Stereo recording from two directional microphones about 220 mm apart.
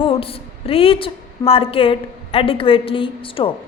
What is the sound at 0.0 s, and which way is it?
A woman's voice, 25° left (ahead or behind).